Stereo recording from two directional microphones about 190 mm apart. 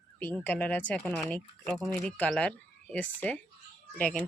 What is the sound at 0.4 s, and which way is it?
Speech, 10° left (ahead or behind).